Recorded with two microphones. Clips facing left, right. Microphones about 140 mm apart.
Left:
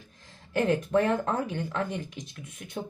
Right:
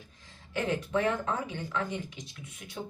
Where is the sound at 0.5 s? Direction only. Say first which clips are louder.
Left 5 dB; 50° left (ahead or behind).